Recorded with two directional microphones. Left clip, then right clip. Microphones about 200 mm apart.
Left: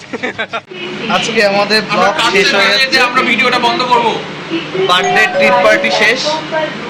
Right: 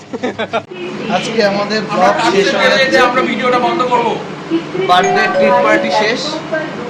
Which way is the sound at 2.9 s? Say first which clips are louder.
Left 1 dB; 30° right (ahead or behind).